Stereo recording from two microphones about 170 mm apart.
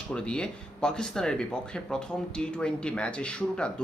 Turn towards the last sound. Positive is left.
turn(degrees=5)  # may be behind; listen again after turning